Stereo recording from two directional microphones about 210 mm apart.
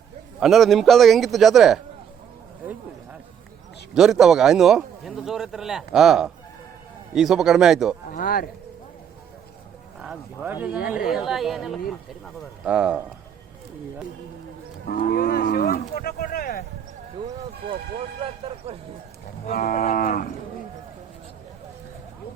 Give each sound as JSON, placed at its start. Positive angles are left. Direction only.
{"t": 0.3, "sound": "a man's voice", "side_deg": 0}
{"t": 3.9, "sound": "a man's voice", "side_deg": 0}
{"t": 8.1, "sound": "cattle", "side_deg": 45}
{"t": 10.0, "sound": "a man's voice", "side_deg": -5}
{"t": 14.8, "sound": "cattle", "side_deg": 45}
{"t": 18.4, "sound": "speech", "side_deg": -25}
{"t": 19.5, "sound": "cattle", "side_deg": 40}